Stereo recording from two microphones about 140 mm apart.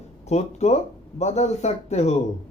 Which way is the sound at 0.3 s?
55° left (ahead or behind).